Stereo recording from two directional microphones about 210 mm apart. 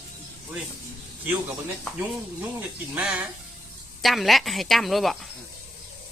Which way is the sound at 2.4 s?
5° right (ahead or behind).